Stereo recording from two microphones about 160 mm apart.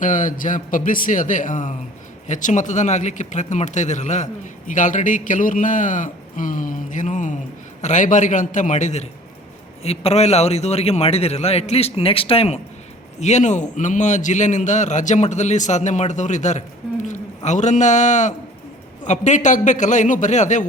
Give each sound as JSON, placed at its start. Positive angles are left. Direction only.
{"t": 0.0, "sound": "a man's voice", "side_deg": 55}